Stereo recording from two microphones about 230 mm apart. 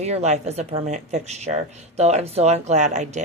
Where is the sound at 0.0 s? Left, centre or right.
Right.